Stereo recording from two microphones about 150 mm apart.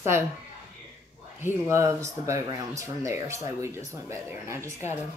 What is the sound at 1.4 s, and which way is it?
Speech, 20° right (ahead or behind).